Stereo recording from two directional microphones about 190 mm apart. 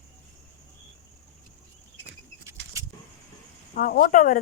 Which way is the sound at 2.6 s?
60° right (ahead or behind).